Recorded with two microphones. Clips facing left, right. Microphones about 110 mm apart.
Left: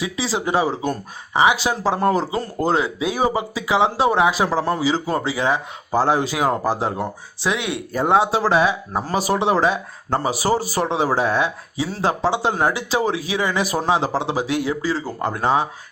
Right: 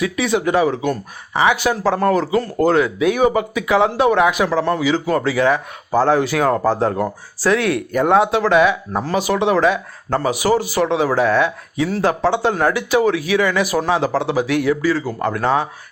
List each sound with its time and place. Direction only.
0.0 s speech: 30° left (ahead or behind)
1.3 s speech: 20° left (ahead or behind)
6.8 s speech: 5° left (ahead or behind)
7.4 s speech: 20° left (ahead or behind)
10.3 s speech: 35° left (ahead or behind)
12.0 s speech: 15° left (ahead or behind)